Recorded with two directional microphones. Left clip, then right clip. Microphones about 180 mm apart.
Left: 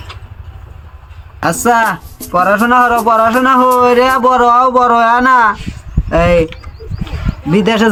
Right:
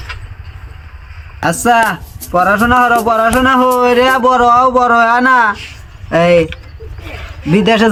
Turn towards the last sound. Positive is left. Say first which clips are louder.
# right 1 dB
turn(degrees=0)  # may be behind; listen again after turning